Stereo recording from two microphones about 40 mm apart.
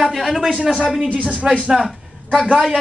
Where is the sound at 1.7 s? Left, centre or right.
Centre.